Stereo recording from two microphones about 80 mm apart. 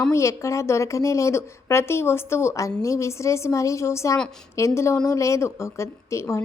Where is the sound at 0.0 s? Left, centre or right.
Left.